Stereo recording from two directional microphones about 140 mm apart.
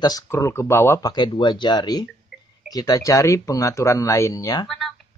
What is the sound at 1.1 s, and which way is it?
Speech, 35° left (ahead or behind).